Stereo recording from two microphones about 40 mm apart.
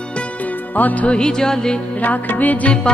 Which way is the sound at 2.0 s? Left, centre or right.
Left.